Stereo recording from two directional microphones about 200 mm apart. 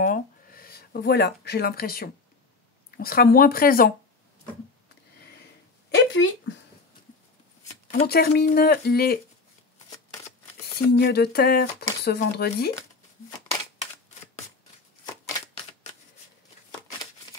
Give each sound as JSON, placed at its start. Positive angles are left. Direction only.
{"t": 0.0, "sound": "speech", "side_deg": 45}
{"t": 5.9, "sound": "speech", "side_deg": 65}
{"t": 8.1, "sound": "speech", "side_deg": 50}
{"t": 10.9, "sound": "speech", "side_deg": 55}